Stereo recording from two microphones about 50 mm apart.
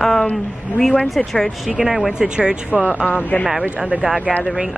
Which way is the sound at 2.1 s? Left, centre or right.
Centre.